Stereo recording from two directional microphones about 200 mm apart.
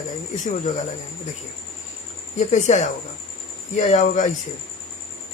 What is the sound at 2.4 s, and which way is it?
Speech, 35° left (ahead or behind).